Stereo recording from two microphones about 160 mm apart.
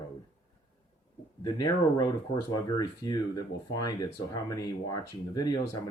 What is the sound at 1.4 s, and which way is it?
Speech, 25° left (ahead or behind).